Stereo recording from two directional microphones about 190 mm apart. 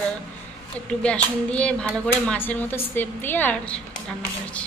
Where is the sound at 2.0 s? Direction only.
5° left (ahead or behind).